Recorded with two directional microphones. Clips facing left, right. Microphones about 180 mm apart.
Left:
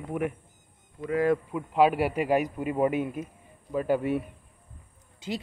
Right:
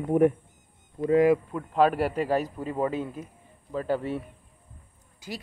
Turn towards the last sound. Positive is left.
turn(degrees=25)  # may be behind; listen again after turning